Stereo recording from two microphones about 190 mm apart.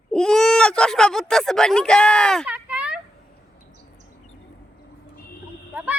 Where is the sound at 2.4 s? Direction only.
5° right (ahead or behind).